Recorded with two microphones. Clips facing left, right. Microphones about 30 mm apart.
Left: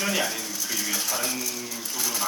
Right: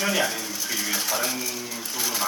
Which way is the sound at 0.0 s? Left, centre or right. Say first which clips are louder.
Right 2 dB; centre.